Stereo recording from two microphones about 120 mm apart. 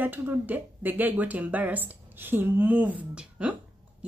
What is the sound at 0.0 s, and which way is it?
Speech, 15° right (ahead or behind).